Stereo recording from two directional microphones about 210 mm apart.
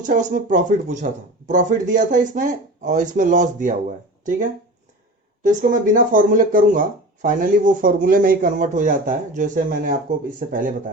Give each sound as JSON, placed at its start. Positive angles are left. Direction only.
{"t": 0.0, "sound": "speech", "side_deg": -35}
{"t": 5.4, "sound": "speech", "side_deg": -40}